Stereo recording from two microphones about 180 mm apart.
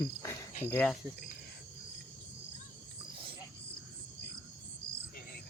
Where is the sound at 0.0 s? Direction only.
15° left (ahead or behind).